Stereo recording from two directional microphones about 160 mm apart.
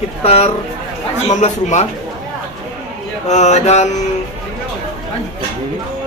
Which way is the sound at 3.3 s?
45° left (ahead or behind).